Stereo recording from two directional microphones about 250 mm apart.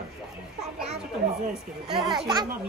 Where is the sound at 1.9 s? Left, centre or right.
Centre.